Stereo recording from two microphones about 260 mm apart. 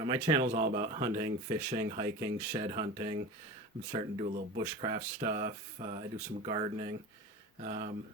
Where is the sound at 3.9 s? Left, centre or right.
Right.